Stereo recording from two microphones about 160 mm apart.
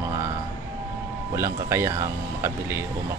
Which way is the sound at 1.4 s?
15° right (ahead or behind).